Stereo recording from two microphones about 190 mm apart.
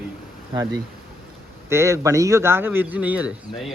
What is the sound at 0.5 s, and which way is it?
A man's voice, 20° right (ahead or behind).